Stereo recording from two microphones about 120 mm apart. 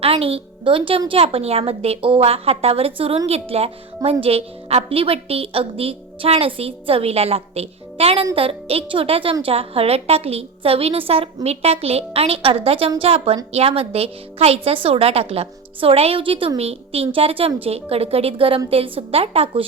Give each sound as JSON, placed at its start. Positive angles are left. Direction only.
{"t": 0.0, "sound": "a woman's voice", "side_deg": -55}